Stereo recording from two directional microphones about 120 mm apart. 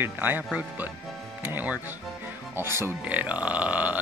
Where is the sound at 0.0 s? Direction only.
15° right (ahead or behind).